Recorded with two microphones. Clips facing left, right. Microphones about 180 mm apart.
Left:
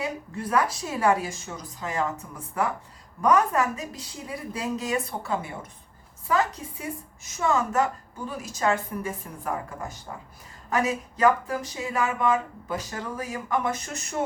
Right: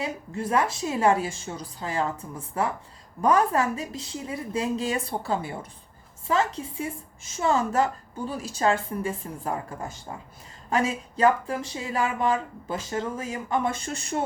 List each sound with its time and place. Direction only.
0.0 s a woman's voice: 25° right (ahead or behind)